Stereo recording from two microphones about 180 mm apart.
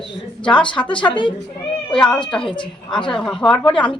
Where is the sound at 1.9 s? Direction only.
5° left (ahead or behind).